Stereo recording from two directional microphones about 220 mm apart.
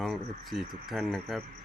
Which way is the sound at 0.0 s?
Centre (ahead or behind).